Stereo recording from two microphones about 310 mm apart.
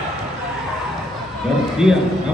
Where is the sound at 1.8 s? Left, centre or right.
Centre.